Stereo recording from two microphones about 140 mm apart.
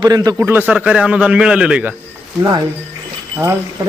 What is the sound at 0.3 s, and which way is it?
A man's voice, 15° right (ahead or behind).